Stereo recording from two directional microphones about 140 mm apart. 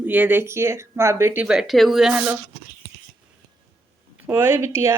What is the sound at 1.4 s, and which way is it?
Speech, 5° right (ahead or behind).